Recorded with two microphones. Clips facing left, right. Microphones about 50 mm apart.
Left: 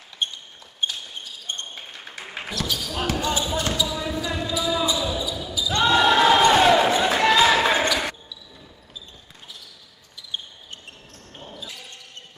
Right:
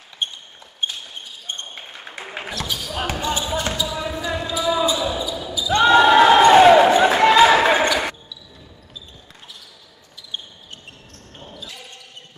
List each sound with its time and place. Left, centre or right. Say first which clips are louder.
0.2 s basketball bounce: right 1 dB; centre
3.8 s basketball bounce: right 1 dB; centre
5.5 s basketball bounce: right 7 dB; right
5.8 s a sound: right 6 dB; right
11.3 s basketball bounce: even; centre